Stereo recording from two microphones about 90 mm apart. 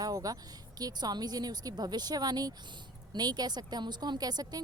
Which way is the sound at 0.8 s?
45° right (ahead or behind).